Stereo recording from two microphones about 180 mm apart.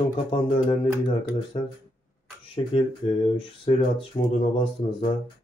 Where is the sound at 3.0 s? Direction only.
30° left (ahead or behind).